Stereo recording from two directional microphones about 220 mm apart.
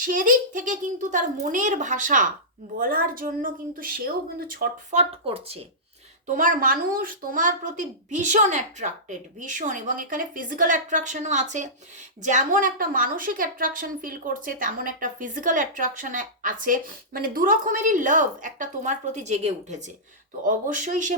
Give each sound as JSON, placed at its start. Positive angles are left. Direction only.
{"t": 0.0, "sound": "a woman's voice", "side_deg": -35}